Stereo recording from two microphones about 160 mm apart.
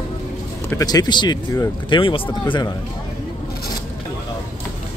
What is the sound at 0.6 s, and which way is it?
Speech, 20° left (ahead or behind).